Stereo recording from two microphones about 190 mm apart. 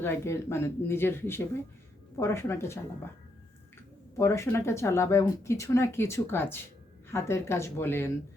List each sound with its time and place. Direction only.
0.0 s speech: 15° left (ahead or behind)
4.2 s speech: 15° left (ahead or behind)